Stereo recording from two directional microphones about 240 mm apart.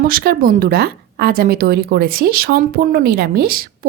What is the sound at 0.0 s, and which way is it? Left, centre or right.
Speech, right.